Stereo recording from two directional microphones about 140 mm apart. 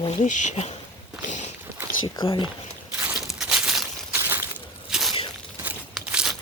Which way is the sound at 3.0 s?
10° right (ahead or behind).